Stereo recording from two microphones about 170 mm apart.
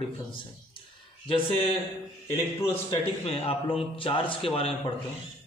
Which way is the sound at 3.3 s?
35° left (ahead or behind).